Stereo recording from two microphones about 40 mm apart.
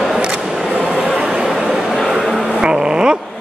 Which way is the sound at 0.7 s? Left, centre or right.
Right.